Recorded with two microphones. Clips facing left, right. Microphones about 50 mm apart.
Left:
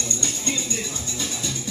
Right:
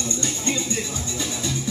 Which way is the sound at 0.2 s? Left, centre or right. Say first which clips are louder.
Right 3 dB; centre.